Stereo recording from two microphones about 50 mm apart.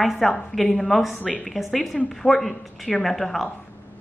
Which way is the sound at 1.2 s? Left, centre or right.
Left.